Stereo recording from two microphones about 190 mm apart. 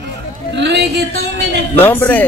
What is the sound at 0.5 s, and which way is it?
Speech, 65° right (ahead or behind).